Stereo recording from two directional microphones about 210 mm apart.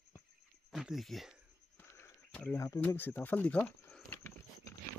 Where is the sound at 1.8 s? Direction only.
10° left (ahead or behind).